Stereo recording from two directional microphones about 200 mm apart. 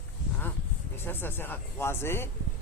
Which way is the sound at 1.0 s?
10° left (ahead or behind).